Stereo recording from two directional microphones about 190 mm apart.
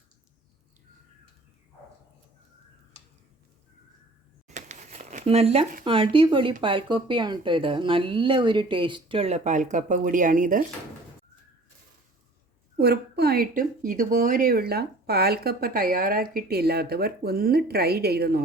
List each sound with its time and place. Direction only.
4.4 s crumpling: 40° right (ahead or behind)
5.8 s speech: 30° right (ahead or behind); by 10.6 s 45° right (ahead or behind)
12.7 s speech: 55° right (ahead or behind)